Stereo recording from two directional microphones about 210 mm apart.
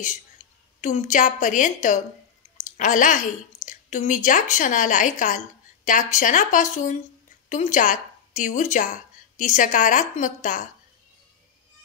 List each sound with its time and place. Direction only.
0.7 s a woman's voice: 35° left (ahead or behind)